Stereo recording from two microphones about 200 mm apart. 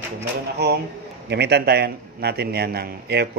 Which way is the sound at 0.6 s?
55° right (ahead or behind).